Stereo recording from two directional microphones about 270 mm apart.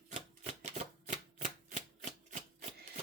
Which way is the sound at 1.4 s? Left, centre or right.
Right.